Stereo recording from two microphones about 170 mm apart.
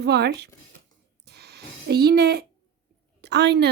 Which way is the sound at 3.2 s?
85° right.